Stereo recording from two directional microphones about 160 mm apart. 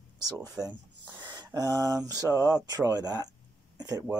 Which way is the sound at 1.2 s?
25° right (ahead or behind).